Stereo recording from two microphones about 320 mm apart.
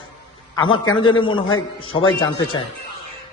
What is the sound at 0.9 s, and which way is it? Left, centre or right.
A man's voice, centre.